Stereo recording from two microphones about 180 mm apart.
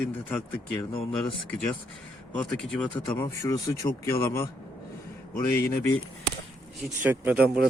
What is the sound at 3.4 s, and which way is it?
Speech, 20° left (ahead or behind).